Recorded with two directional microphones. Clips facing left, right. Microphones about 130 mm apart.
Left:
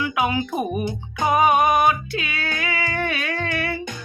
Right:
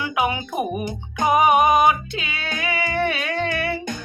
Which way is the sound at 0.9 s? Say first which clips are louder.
Right 1 dB; 15° right (ahead or behind).